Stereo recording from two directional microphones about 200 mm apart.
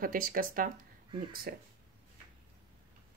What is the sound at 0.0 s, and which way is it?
Speech, 45° right (ahead or behind).